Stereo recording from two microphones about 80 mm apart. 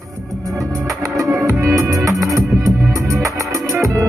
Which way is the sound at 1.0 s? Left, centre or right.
Right.